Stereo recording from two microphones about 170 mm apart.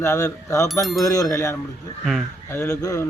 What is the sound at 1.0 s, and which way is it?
Speech, 20° left (ahead or behind).